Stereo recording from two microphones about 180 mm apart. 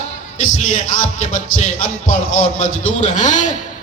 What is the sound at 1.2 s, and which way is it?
Speech, 45° left (ahead or behind).